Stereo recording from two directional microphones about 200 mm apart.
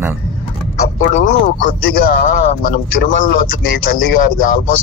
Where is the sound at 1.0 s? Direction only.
40° left (ahead or behind).